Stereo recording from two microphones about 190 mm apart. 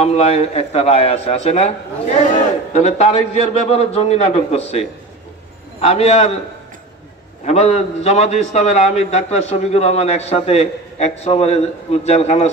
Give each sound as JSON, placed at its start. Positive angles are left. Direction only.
{"t": 0.0, "sound": "a man's voice", "side_deg": 35}
{"t": 7.4, "sound": "a man's voice", "side_deg": 35}